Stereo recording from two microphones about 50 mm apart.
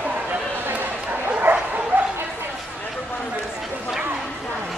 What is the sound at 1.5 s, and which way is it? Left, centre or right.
Bow-wow, right.